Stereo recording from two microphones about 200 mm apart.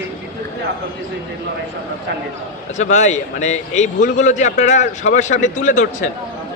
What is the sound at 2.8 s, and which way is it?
Speech, 35° left (ahead or behind).